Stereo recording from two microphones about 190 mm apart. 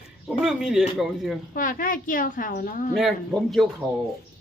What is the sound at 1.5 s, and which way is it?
A woman's voice, 45° left (ahead or behind).